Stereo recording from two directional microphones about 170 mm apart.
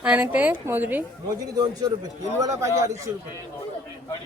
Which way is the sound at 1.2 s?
20° right (ahead or behind).